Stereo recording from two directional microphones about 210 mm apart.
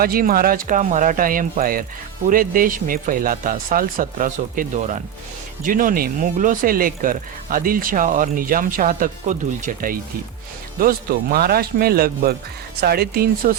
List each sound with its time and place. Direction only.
0.0 s speech: 45° right (ahead or behind)